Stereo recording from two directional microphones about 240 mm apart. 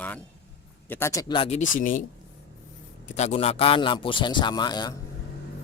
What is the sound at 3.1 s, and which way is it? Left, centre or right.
A man's voice, left.